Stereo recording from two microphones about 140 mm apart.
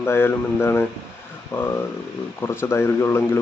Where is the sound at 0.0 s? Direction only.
15° left (ahead or behind).